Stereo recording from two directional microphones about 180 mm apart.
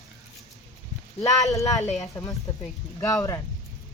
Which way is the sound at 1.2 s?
20° left (ahead or behind).